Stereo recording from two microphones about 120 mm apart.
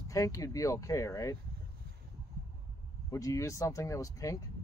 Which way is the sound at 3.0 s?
30° left (ahead or behind).